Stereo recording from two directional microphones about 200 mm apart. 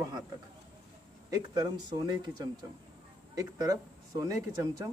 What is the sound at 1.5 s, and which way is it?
Speech, 20° right (ahead or behind).